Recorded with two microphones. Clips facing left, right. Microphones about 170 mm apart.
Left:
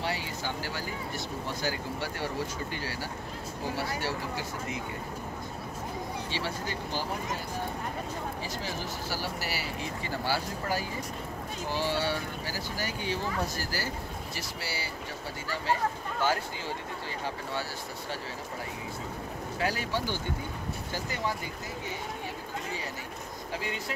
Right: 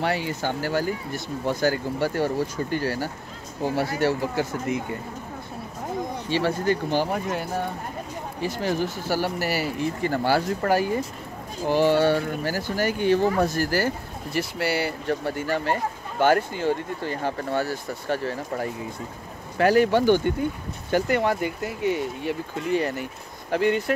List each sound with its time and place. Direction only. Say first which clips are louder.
0.0 s speech: right 8 dB; 55° right (ahead or behind)
6.3 s speech: right 15 dB; 55° right (ahead or behind)